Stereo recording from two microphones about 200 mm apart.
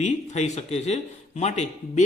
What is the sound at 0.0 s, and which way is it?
A man's voice, 35° left (ahead or behind).